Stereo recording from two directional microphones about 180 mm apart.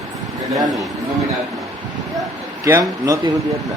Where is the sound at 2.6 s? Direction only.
20° right (ahead or behind).